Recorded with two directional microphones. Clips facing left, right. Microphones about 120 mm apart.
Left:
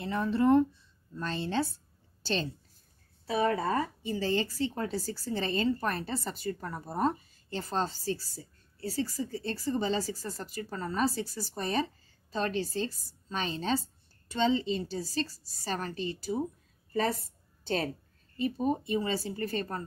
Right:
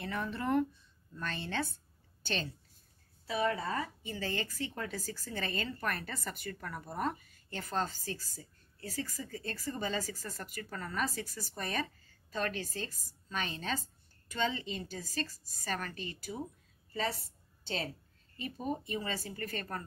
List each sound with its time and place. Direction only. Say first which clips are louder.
0.0 s a woman's voice: left 9 dB; 25° left (ahead or behind)
16.9 s a woman's voice: left 6 dB; 45° left (ahead or behind)
18.4 s speech: left 8 dB; 35° left (ahead or behind)